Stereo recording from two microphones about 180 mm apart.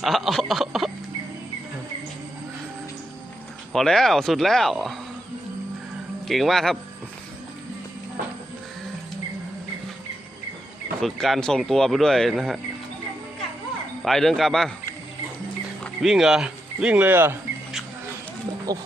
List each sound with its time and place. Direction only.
0.0 s speech: centre (ahead or behind)
3.7 s speech: centre (ahead or behind)
6.2 s speech: centre (ahead or behind)
11.0 s speech: centre (ahead or behind)
14.0 s speech: centre (ahead or behind)
15.8 s speech: centre (ahead or behind); by 18.8 s 20° right (ahead or behind)